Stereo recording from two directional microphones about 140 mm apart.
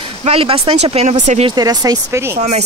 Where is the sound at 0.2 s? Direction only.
45° right (ahead or behind).